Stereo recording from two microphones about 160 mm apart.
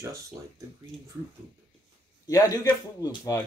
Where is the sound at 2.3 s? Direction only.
20° left (ahead or behind).